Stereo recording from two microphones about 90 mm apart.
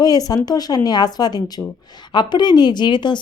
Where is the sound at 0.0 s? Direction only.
45° left (ahead or behind).